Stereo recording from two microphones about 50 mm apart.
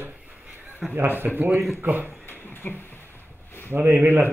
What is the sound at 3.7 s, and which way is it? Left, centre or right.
Speech, right.